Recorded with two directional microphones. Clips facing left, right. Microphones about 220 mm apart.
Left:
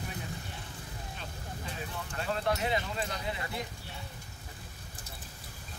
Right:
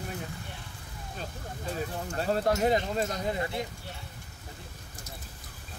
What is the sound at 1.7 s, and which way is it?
Speech, 40° right (ahead or behind).